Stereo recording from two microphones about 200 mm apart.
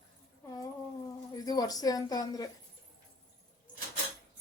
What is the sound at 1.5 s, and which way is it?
A woman's voice, 20° left (ahead or behind).